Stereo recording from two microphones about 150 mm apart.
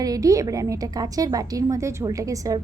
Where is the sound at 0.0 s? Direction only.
25° right (ahead or behind).